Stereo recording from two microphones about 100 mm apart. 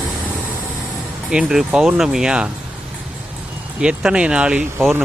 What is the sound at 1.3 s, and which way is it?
Speech, 5° right (ahead or behind).